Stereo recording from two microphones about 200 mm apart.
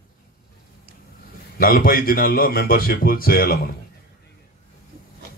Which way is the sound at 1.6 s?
45° left (ahead or behind).